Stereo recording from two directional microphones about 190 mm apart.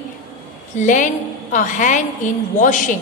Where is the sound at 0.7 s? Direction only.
40° left (ahead or behind).